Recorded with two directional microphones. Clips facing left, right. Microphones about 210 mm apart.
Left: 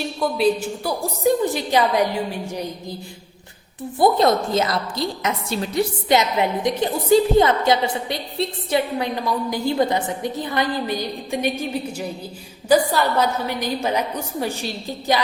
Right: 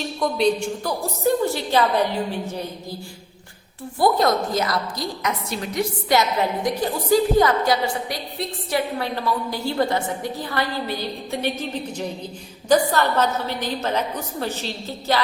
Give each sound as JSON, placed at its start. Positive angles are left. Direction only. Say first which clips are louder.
{"t": 0.2, "sound": "a woman's voice", "louder": "left 1 dB", "side_deg": 5}
{"t": 4.0, "sound": "a woman's voice", "louder": "left 2 dB", "side_deg": 25}